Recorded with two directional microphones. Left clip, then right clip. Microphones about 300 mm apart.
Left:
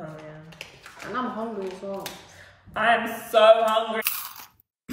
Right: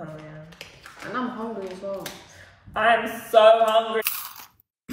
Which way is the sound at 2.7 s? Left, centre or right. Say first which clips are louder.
Right 2 dB; centre.